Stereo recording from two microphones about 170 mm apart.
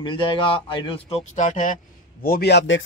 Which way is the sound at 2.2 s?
65° left (ahead or behind).